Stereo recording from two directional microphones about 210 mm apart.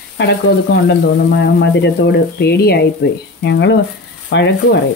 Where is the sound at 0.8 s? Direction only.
55° left (ahead or behind).